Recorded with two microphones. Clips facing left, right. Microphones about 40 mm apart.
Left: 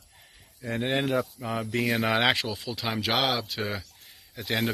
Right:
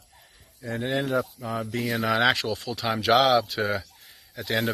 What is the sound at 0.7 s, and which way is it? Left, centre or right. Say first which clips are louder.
Speech: even; left.